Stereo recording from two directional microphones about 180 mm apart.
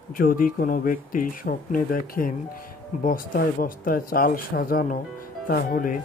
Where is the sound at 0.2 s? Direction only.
50° left (ahead or behind).